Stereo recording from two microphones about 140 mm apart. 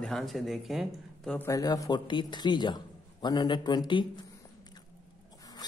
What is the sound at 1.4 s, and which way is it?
A man's voice, 25° left (ahead or behind).